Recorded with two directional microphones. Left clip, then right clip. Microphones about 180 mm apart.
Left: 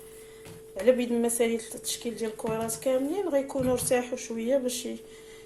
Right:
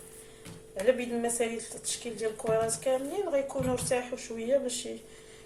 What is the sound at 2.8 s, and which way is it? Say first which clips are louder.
Speech: left 3 dB; 45° left (ahead or behind).